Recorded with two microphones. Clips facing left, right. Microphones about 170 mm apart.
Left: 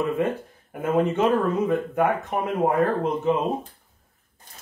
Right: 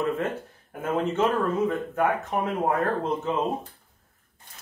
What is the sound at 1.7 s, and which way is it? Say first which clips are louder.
Speech: left 3 dB; 15° left (ahead or behind).